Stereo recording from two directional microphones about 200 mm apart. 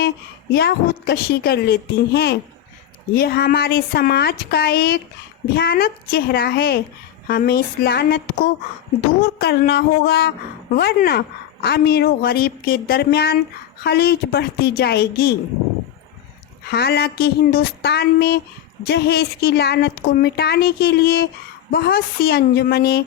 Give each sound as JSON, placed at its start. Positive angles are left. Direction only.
{"t": 0.5, "sound": "speech", "side_deg": 50}
{"t": 16.6, "sound": "speech", "side_deg": 55}